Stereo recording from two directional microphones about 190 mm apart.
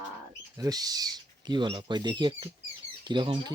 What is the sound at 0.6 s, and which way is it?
Speech, 20° right (ahead or behind).